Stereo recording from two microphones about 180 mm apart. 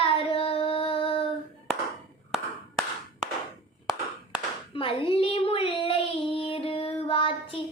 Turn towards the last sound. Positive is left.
turn(degrees=30)  # may be behind; listen again after turning